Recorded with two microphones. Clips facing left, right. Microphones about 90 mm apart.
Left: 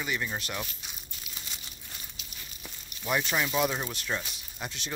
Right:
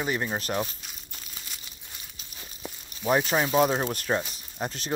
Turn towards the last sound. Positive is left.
turn(degrees=-40)  # may be behind; listen again after turning